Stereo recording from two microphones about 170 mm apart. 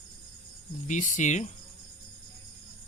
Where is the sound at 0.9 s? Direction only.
45° left (ahead or behind).